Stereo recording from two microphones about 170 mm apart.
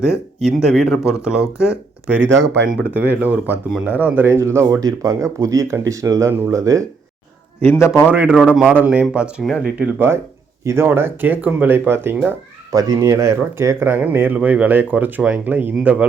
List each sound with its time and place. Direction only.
0.4 s speech: centre (ahead or behind); by 6.8 s 20° right (ahead or behind)
7.6 s a man's voice: 15° left (ahead or behind)
8.0 s speech: 10° right (ahead or behind)